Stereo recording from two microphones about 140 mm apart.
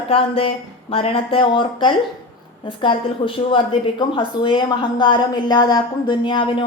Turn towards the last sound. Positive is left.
turn(degrees=35)  # may be behind; listen again after turning